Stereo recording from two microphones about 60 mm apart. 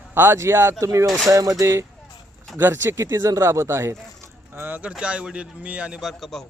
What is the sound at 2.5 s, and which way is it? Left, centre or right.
Speech, right.